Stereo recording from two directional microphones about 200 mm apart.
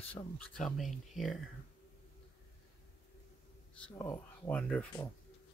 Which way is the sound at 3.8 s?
20° left (ahead or behind).